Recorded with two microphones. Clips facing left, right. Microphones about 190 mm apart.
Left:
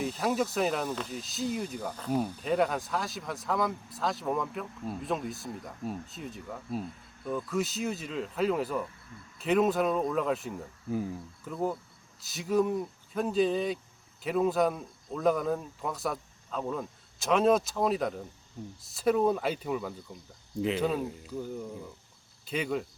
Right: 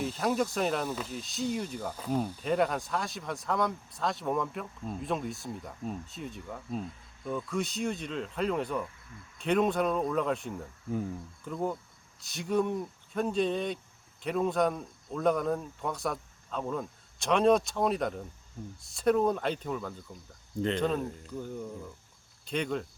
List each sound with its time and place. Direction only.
0.0 s speech: centre (ahead or behind)